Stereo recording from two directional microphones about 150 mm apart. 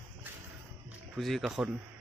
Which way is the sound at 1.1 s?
Centre (ahead or behind).